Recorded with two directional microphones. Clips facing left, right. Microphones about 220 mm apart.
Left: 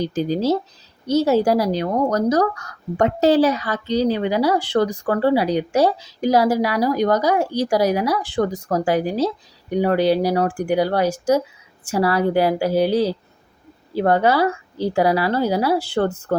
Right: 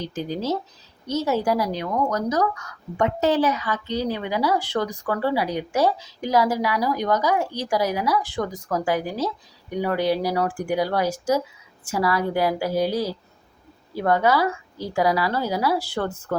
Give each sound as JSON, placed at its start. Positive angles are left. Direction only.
{"t": 0.0, "sound": "a woman's voice", "side_deg": 35}
{"t": 8.0, "sound": "speech", "side_deg": 70}
{"t": 8.4, "sound": "a woman's voice", "side_deg": 30}